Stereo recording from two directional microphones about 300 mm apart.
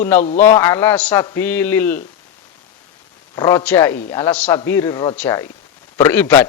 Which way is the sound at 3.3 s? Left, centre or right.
Centre.